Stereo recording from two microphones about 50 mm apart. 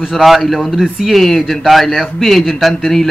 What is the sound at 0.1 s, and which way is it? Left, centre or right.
Speech, centre.